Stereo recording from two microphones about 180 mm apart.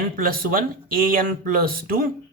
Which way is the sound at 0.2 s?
55° right (ahead or behind).